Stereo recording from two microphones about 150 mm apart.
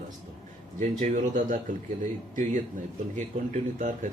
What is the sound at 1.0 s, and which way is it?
Speech, 60° right (ahead or behind).